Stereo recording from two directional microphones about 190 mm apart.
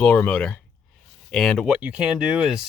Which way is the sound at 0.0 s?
5° left (ahead or behind).